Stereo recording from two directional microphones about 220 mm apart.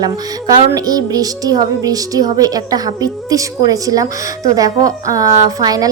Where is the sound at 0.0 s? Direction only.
20° right (ahead or behind).